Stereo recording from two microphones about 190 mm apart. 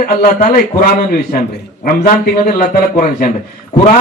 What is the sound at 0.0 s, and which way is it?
A man's voice, 40° left (ahead or behind).